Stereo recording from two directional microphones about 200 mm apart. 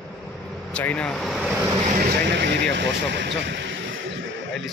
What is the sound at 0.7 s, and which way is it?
Speech, 5° left (ahead or behind).